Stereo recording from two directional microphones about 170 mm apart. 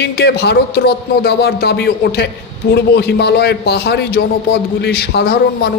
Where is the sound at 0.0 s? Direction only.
75° left (ahead or behind).